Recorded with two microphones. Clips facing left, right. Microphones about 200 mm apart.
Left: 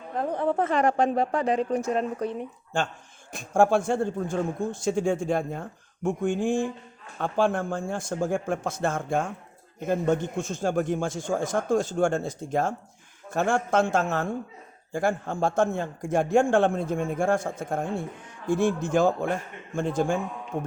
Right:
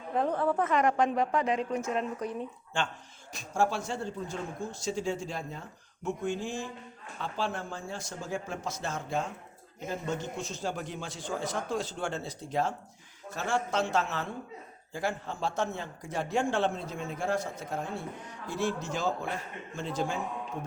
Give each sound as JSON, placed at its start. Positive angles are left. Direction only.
{"t": 0.3, "sound": "a woman's voice", "side_deg": 20}
{"t": 0.5, "sound": "a woman's voice", "side_deg": 30}
{"t": 2.7, "sound": "a man's voice", "side_deg": 45}